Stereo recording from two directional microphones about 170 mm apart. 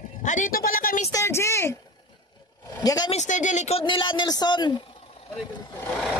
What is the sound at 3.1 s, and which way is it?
A man's voice, 45° left (ahead or behind).